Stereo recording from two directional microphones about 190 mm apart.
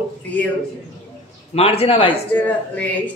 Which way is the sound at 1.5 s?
30° left (ahead or behind).